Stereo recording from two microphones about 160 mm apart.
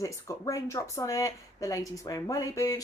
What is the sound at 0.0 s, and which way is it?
Speech, 20° left (ahead or behind).